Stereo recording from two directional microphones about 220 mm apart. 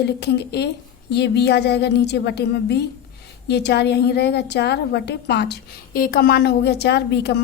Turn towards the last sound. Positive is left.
turn(degrees=50)  # may be behind; listen again after turning